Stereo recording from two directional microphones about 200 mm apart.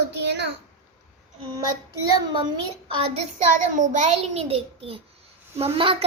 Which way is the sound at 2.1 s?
20° right (ahead or behind).